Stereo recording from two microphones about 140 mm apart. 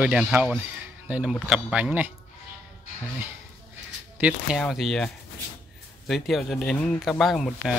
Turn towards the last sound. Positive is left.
turn(degrees=0)  # may be behind; listen again after turning